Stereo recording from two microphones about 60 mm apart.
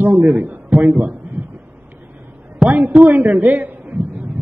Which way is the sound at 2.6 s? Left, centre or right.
Right.